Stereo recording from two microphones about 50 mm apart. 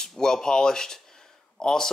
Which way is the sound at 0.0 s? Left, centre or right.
Centre.